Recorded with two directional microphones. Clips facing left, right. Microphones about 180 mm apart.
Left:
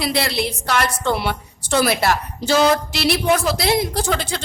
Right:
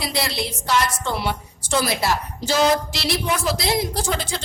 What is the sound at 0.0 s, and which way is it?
A woman's voice, 65° left (ahead or behind).